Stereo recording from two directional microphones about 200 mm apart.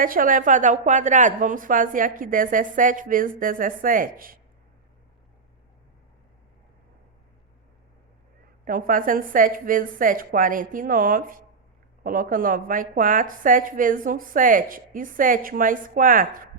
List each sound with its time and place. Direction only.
0.0 s speech: 45° right (ahead or behind)
8.6 s speech: 45° right (ahead or behind)